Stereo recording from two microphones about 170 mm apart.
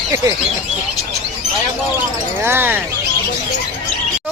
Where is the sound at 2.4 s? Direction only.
10° right (ahead or behind).